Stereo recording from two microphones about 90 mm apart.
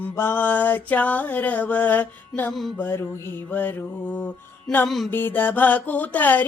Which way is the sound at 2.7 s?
25° left (ahead or behind).